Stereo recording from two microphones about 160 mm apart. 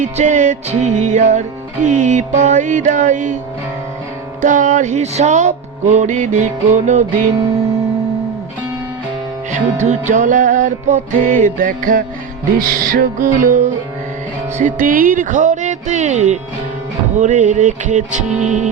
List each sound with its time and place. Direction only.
0.0 s music: 50° right (ahead or behind)
4.4 s music: 55° right (ahead or behind)
9.5 s music: 50° right (ahead or behind)
14.6 s music: 60° right (ahead or behind)